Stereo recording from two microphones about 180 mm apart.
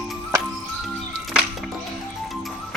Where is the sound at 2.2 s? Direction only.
Centre (ahead or behind).